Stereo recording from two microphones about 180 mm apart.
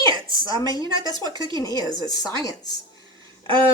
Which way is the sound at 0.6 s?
20° left (ahead or behind).